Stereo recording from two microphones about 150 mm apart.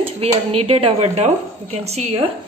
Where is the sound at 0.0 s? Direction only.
40° right (ahead or behind).